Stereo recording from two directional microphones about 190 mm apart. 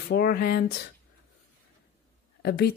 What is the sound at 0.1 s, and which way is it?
Speech, 50° left (ahead or behind).